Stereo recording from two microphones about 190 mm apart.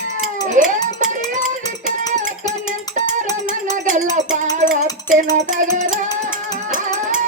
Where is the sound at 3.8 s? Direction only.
45° right (ahead or behind).